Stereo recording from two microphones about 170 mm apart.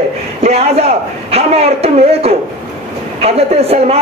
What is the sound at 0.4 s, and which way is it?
A man's voice, 40° right (ahead or behind).